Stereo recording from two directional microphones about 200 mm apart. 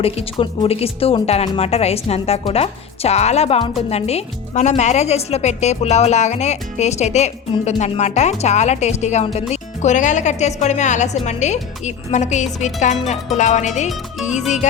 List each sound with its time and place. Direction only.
0.0 s speech: 30° left (ahead or behind)